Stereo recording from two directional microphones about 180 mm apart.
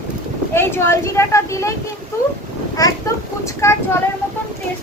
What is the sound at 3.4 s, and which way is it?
Speech, 15° left (ahead or behind).